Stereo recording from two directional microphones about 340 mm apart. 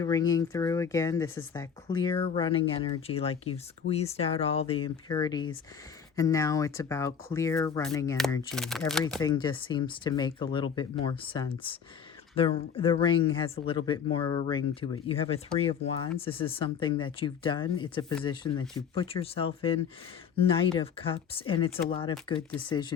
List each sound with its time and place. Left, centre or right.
0.0 s speech: centre
9.3 s speech: centre